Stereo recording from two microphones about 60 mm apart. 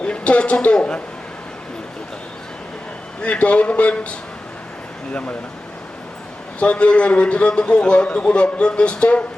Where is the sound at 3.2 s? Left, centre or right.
Left.